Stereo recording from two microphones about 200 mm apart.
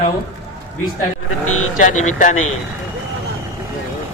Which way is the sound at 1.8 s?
40° left (ahead or behind).